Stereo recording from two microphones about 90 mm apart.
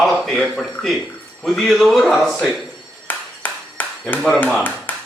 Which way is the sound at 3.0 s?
20° left (ahead or behind).